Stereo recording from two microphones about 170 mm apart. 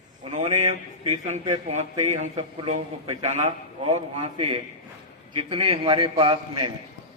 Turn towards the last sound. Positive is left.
turn(degrees=-30)  # may be behind; listen again after turning